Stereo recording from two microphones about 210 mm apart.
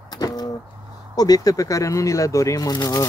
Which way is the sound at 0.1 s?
20° left (ahead or behind).